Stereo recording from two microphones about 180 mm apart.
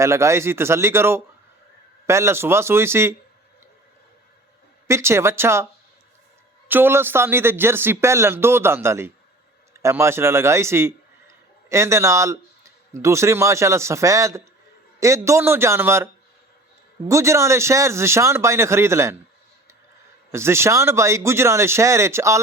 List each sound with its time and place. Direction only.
0.0 s speech: 15° right (ahead or behind)
4.9 s speech: 15° right (ahead or behind)
6.7 s a man's voice: 10° right (ahead or behind)
17.1 s speech: 15° right (ahead or behind)
20.3 s speech: 15° right (ahead or behind)